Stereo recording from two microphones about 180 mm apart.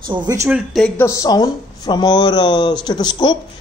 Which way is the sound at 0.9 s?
15° left (ahead or behind).